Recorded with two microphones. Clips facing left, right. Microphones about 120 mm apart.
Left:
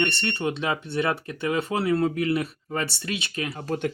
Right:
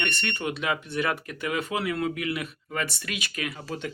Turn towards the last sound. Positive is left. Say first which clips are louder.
# left 6 dB
turn(degrees=55)  # may be behind; listen again after turning